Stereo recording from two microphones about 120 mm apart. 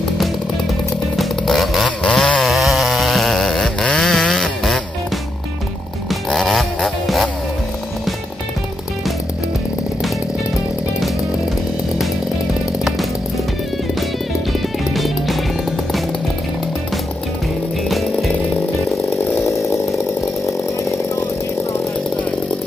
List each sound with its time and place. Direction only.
1.1 s chainsaw: centre (ahead or behind)
6.0 s a sound: centre (ahead or behind)
15.0 s music: centre (ahead or behind)
17.8 s music: centre (ahead or behind)
19.3 s chainsaw: 25° left (ahead or behind)